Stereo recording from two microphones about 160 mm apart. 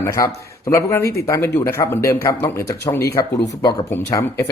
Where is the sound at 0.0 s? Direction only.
20° left (ahead or behind).